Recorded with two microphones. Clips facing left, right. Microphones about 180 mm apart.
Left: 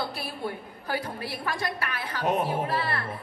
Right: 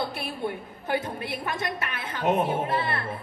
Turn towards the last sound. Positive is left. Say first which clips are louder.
# right 1 dB
turn(degrees=-25)  # may be behind; listen again after turning